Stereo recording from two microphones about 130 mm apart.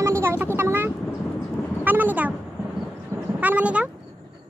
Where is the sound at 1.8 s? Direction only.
15° right (ahead or behind).